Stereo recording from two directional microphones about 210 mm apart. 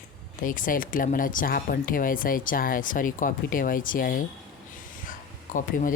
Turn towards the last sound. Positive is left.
turn(degrees=40)  # may be behind; listen again after turning